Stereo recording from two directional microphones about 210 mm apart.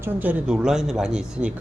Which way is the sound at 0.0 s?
10° right (ahead or behind).